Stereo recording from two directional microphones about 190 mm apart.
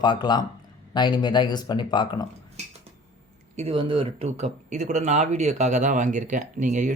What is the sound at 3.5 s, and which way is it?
Speech, 30° right (ahead or behind).